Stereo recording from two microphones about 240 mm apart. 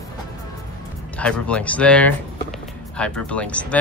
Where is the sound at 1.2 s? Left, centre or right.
Centre.